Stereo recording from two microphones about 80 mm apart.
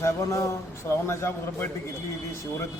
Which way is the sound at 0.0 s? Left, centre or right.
Left.